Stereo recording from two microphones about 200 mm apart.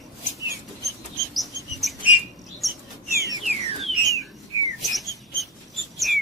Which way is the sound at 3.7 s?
30° right (ahead or behind).